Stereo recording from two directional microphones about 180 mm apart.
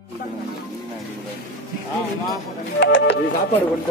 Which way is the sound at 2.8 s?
75° left (ahead or behind).